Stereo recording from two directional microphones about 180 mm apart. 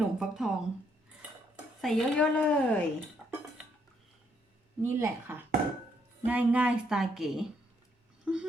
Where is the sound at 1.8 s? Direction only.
Centre (ahead or behind).